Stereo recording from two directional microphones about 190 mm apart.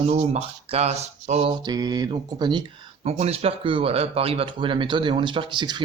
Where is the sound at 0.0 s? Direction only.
35° right (ahead or behind).